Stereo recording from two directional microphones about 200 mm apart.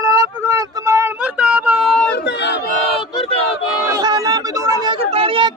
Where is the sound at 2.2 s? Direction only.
60° left (ahead or behind).